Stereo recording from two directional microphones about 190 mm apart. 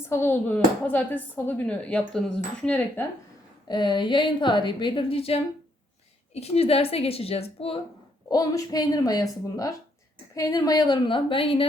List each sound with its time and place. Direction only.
0.1 s speech: 10° left (ahead or behind)
3.7 s a woman's voice: 25° left (ahead or behind)
8.3 s a woman's voice: 20° left (ahead or behind)
10.3 s a woman's voice: 15° left (ahead or behind)